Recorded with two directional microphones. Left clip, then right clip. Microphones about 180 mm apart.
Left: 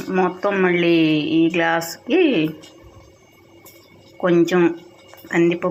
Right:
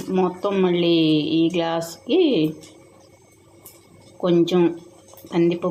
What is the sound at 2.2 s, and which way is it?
Speech, 10° right (ahead or behind).